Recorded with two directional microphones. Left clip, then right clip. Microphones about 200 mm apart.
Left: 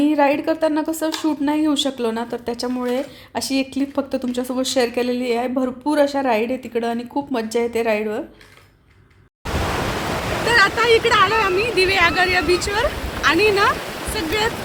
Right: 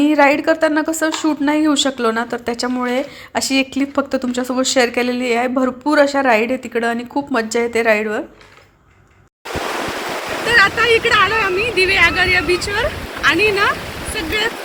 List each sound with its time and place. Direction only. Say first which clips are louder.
0.0 s a woman's voice: right 4 dB; 10° right (ahead or behind)
10.5 s speech: right 3 dB; 20° left (ahead or behind)